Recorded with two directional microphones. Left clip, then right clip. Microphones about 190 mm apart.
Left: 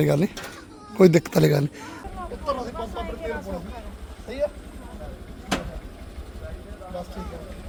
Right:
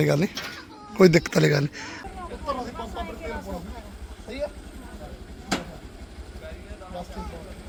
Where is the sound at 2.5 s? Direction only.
25° left (ahead or behind).